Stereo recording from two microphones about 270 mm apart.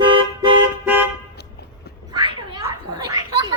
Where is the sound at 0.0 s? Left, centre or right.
Centre.